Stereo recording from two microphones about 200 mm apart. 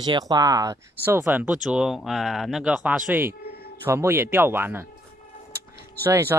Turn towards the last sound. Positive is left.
turn(degrees=-10)  # may be behind; listen again after turning